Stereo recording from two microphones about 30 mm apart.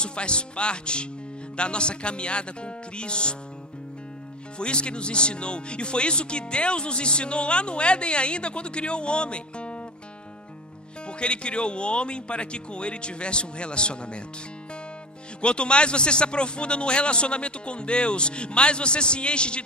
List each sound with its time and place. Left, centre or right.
0.0 s speech: left
4.6 s speech: left
11.1 s speech: left
15.4 s speech: left